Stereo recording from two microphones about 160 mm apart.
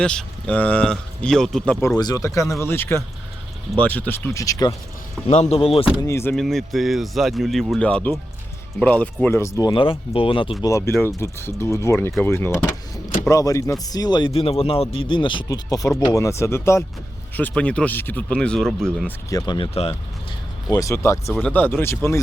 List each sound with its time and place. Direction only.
0.0 s speech: 5° left (ahead or behind)
2.0 s speech: 25° left (ahead or behind)
5.3 s speech: 40° left (ahead or behind)
6.0 s speech: 15° left (ahead or behind)
6.3 s speech: centre (ahead or behind); by 10.5 s 30° left (ahead or behind)
10.6 s speech: 20° left (ahead or behind); by 19.1 s 5° left (ahead or behind)
19.5 s speech: 30° left (ahead or behind)
20.7 s speech: 20° left (ahead or behind)
21.2 s speech: centre (ahead or behind)
21.5 s speech: 10° left (ahead or behind)